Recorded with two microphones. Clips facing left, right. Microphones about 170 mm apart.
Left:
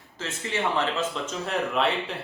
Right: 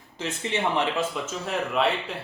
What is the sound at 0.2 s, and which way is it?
Speech, 20° right (ahead or behind).